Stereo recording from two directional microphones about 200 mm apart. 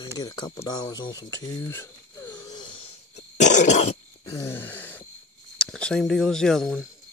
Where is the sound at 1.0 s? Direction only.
20° left (ahead or behind).